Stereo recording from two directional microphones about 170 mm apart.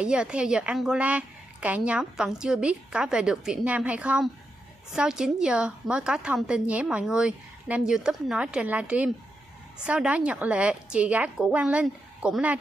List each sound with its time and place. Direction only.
0.0 s a woman's voice: 5° right (ahead or behind)